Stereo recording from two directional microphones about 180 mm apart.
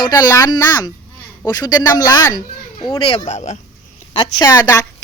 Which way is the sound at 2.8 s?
30° left (ahead or behind).